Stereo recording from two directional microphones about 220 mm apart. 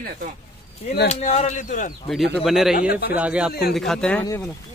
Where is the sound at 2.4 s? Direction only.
Centre (ahead or behind).